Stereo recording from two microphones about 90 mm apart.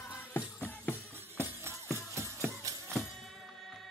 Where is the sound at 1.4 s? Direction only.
30° right (ahead or behind).